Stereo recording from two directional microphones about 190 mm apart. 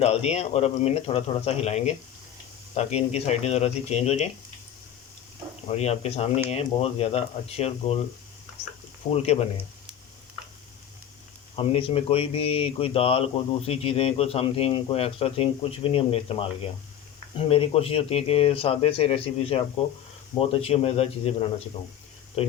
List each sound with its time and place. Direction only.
0.0 s a man's voice: 35° left (ahead or behind)
5.7 s a man's voice: 35° left (ahead or behind)
9.1 s a man's voice: 35° left (ahead or behind)
11.5 s speech: 30° left (ahead or behind)
17.5 s a man's voice: 30° left (ahead or behind)
22.4 s speech: 35° left (ahead or behind)